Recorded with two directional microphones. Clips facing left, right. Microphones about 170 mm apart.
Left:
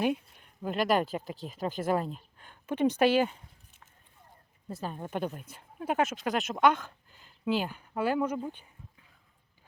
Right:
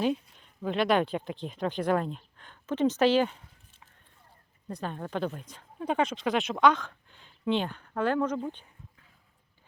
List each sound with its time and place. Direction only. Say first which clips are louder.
0.0 s speech: right 1 dB; 10° left (ahead or behind)
4.7 s speech: right 1 dB; 5° left (ahead or behind)